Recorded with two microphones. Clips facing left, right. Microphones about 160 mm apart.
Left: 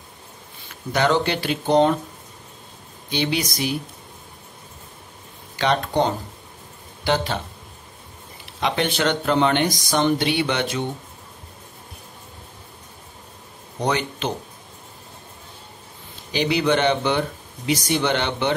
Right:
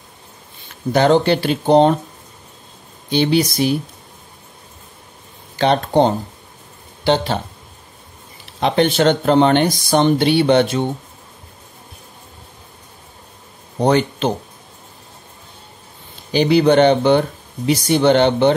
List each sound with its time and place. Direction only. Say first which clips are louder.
0.9 s speech: right 7 dB; 35° right (ahead or behind)
3.1 s speech: right 8 dB; 35° right (ahead or behind)
5.6 s speech: right 6 dB; 30° right (ahead or behind)
8.5 s speech: right 7 dB; 35° right (ahead or behind)
13.7 s speech: right 8 dB; 35° right (ahead or behind)
16.3 s speech: right 7 dB; 35° right (ahead or behind)